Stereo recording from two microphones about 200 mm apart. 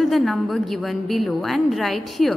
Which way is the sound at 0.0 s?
Centre (ahead or behind).